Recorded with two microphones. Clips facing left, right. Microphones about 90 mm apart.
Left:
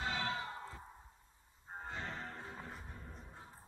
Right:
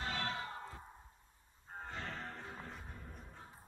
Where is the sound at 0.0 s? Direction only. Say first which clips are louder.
Left 1 dB; 15° left (ahead or behind).